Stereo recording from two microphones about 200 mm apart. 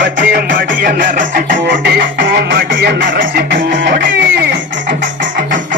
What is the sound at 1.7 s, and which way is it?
Music, 60° right (ahead or behind).